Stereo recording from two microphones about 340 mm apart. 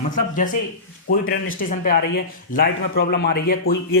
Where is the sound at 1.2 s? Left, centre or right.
Left.